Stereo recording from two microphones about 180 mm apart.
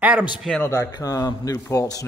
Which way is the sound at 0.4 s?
5° left (ahead or behind).